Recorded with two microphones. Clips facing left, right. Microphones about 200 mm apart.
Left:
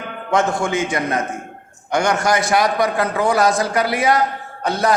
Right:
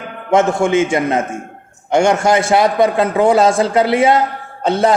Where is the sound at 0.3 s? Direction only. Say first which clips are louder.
Right 6 dB; 20° right (ahead or behind).